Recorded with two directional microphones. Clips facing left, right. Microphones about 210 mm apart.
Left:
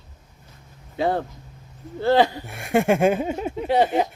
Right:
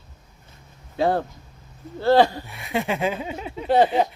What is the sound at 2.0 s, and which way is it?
Speech, 20° left (ahead or behind).